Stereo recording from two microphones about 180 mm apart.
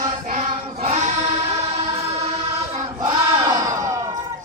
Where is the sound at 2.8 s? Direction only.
25° right (ahead or behind).